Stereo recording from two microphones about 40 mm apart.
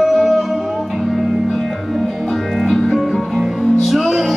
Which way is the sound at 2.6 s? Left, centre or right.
Centre.